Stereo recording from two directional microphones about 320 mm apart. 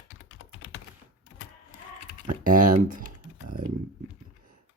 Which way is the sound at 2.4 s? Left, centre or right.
Right.